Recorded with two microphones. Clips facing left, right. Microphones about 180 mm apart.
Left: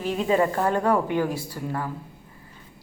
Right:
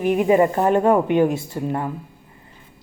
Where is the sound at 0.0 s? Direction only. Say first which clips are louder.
Right 6 dB; 15° right (ahead or behind).